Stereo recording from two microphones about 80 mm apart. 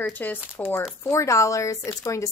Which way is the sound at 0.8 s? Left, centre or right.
Left.